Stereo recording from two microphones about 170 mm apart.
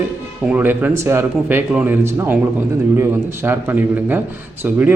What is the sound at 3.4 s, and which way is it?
A man's voice, 10° right (ahead or behind).